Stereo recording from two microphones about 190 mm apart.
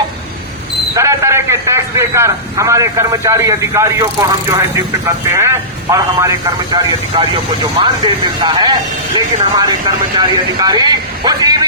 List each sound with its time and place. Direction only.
0.9 s a man's voice: 15° right (ahead or behind)
5.9 s speech: 20° right (ahead or behind)